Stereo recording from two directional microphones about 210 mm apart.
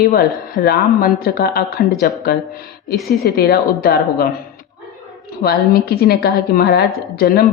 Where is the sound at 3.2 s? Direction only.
45° left (ahead or behind).